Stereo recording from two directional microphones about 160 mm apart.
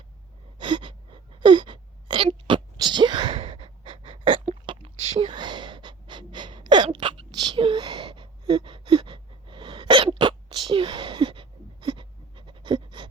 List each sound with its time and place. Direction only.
0.6 s gasp: 30° right (ahead or behind)
1.4 s wail: 30° right (ahead or behind)
4.6 s gasp: 30° right (ahead or behind)
10.7 s goat: 35° right (ahead or behind)